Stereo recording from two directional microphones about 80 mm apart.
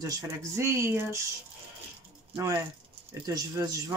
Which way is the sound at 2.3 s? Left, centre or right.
Right.